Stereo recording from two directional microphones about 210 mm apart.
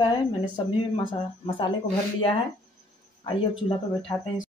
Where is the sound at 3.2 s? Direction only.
20° left (ahead or behind).